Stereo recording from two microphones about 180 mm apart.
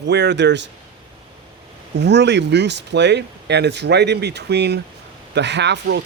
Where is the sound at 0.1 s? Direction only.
70° right (ahead or behind).